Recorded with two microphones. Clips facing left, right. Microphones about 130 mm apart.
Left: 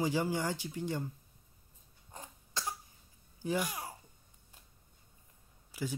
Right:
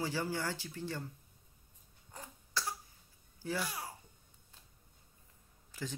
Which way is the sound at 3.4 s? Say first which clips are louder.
Left 4 dB; 15° left (ahead or behind).